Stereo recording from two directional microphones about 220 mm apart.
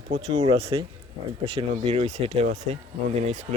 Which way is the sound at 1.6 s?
30° right (ahead or behind).